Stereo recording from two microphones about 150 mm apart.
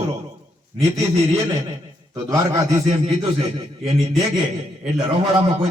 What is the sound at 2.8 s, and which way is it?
Speech, 40° right (ahead or behind).